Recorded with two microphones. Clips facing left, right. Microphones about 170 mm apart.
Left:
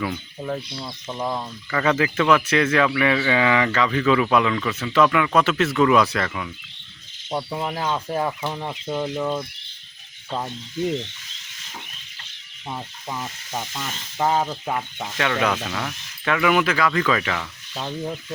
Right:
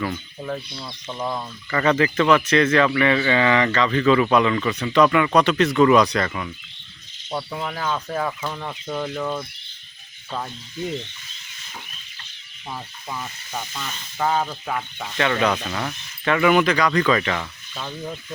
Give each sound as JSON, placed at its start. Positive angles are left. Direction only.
{"t": 0.0, "sound": "speech", "side_deg": 5}
{"t": 7.3, "sound": "speech", "side_deg": 20}
{"t": 12.7, "sound": "speech", "side_deg": 20}
{"t": 13.6, "sound": "speech", "side_deg": 10}
{"t": 14.2, "sound": "sizzle", "side_deg": 20}
{"t": 15.0, "sound": "speech", "side_deg": 5}
{"t": 17.7, "sound": "sizzle", "side_deg": 20}